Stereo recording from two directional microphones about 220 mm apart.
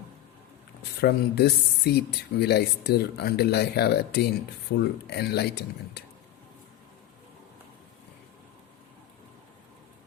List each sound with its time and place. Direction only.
1.0 s speech: 50° left (ahead or behind)